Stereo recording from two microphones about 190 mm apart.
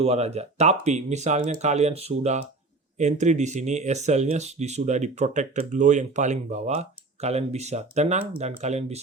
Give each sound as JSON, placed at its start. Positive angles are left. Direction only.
{"t": 0.0, "sound": "speech", "side_deg": -35}